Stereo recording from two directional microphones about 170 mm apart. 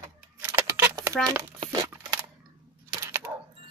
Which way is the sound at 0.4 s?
15° right (ahead or behind).